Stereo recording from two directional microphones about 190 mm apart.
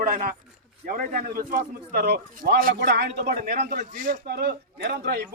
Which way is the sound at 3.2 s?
45° right (ahead or behind).